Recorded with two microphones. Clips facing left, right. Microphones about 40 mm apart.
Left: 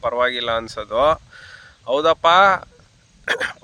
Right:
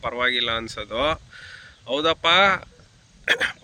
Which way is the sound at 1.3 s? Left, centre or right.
Right.